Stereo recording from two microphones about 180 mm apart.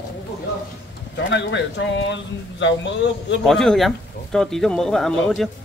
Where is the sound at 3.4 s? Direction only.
Centre (ahead or behind).